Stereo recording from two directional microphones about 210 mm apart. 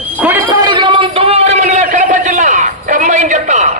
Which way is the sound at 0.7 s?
25° right (ahead or behind).